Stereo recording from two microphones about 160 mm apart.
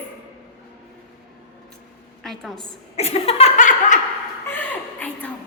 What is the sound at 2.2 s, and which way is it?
Speech, centre (ahead or behind).